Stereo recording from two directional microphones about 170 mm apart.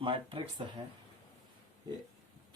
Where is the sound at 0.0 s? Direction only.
30° right (ahead or behind).